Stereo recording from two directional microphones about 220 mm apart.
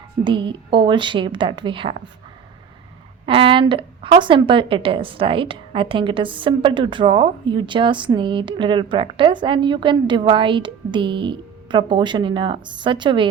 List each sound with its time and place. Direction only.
0.3 s a woman's voice: 20° right (ahead or behind)
3.2 s a woman's voice: 25° right (ahead or behind)